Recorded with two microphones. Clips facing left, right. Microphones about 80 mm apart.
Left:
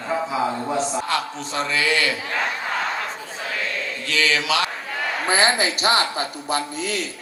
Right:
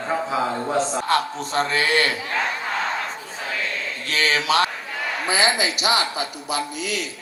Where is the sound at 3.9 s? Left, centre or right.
Right.